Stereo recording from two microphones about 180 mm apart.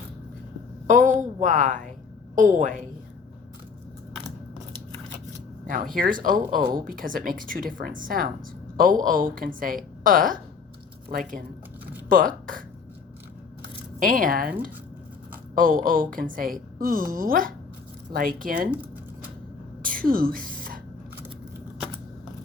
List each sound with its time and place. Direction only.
0.9 s speech: 45° right (ahead or behind)
5.6 s speech: 50° right (ahead or behind)
14.0 s speech: 50° right (ahead or behind)
15.5 s speech: 50° right (ahead or behind)
19.8 s a sound: 50° right (ahead or behind)